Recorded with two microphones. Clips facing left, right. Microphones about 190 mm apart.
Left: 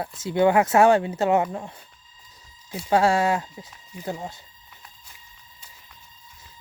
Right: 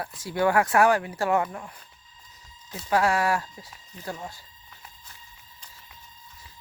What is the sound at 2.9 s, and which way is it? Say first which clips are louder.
Speech: left 3 dB; 25° left (ahead or behind).